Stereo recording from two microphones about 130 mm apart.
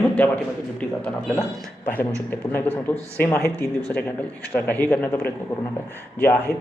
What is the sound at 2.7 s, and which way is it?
Speech, 15° left (ahead or behind).